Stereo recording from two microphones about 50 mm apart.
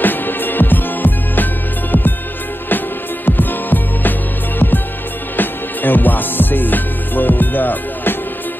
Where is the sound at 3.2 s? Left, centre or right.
Left.